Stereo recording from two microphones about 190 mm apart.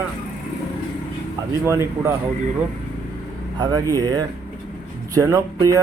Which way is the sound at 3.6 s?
20° right (ahead or behind).